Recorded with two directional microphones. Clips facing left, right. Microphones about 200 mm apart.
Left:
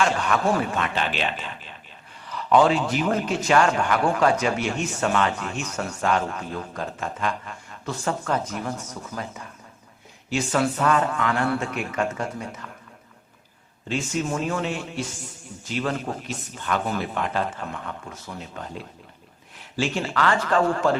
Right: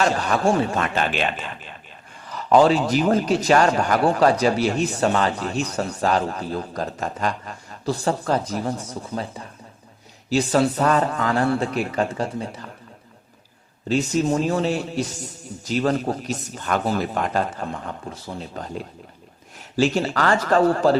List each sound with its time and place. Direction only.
0.0 s a man's voice: 35° right (ahead or behind)
0.8 s a man's voice: 45° right (ahead or behind)
13.8 s a man's voice: 40° right (ahead or behind)